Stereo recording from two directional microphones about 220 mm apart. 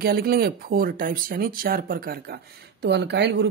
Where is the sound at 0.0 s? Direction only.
45° right (ahead or behind).